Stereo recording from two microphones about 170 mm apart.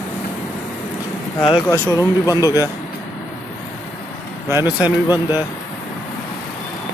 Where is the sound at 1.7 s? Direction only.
20° left (ahead or behind).